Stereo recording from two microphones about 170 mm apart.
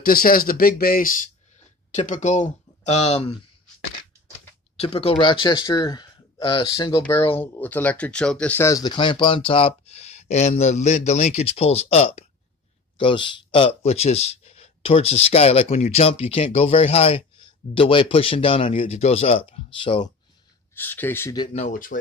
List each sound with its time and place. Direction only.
0.0 s speech: 60° left (ahead or behind); by 3.3 s 35° left (ahead or behind)
4.7 s speech: 35° left (ahead or behind)
7.0 s speech: 15° left (ahead or behind); by 20.1 s 30° left (ahead or behind)
20.7 s speech: 10° left (ahead or behind)
21.5 s speech: 50° left (ahead or behind)